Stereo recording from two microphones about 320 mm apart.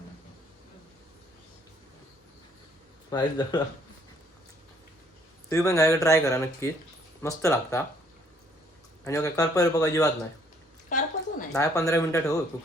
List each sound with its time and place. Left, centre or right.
3.1 s speech: centre
5.5 s speech: centre
9.0 s speech: centre
10.8 s a sound: left
11.5 s speech: centre